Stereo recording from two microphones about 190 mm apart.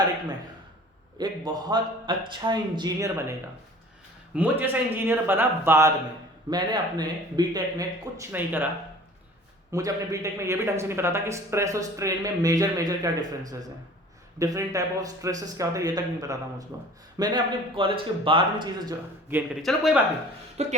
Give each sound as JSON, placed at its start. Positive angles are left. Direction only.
{"t": 1.2, "sound": "speech", "side_deg": -20}
{"t": 4.4, "sound": "a man's voice", "side_deg": -10}
{"t": 9.7, "sound": "a man's voice", "side_deg": -15}
{"t": 19.6, "sound": "speech", "side_deg": 0}
{"t": 20.6, "sound": "speech", "side_deg": -35}